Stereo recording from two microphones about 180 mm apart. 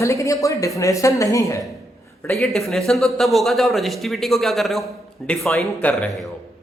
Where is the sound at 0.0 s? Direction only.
15° left (ahead or behind).